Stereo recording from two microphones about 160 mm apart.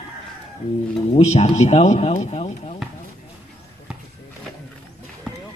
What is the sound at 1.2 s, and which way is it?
Speech, 45° left (ahead or behind).